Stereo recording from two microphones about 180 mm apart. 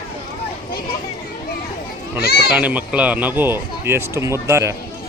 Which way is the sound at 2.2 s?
60° left (ahead or behind).